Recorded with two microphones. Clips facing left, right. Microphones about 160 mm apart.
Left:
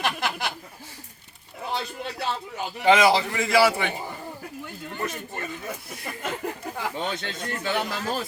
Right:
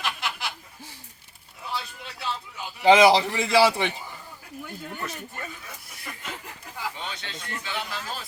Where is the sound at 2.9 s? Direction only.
25° right (ahead or behind).